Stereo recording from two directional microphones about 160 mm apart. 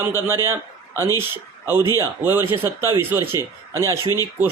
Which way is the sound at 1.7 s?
15° right (ahead or behind).